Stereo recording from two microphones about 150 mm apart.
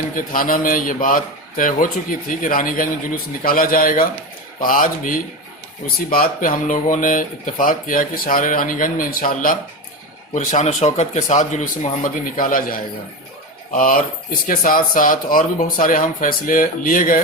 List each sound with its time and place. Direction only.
0.3 s speech: 65° left (ahead or behind)
10.3 s speech: 50° left (ahead or behind)